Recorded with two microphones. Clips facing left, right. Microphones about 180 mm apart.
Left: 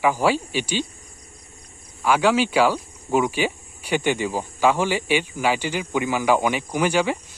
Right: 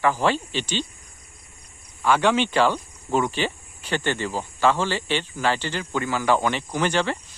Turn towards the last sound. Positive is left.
turn(degrees=10)  # may be behind; listen again after turning